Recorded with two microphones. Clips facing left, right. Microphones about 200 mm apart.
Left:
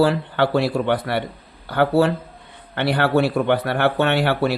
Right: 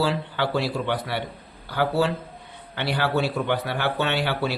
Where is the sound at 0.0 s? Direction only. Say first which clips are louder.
Left 7 dB; 55° left (ahead or behind).